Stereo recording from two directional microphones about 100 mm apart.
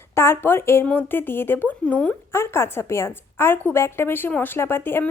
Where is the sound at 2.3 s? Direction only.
25° left (ahead or behind).